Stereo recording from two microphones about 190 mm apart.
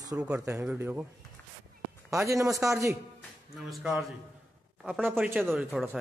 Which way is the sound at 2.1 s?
15° right (ahead or behind).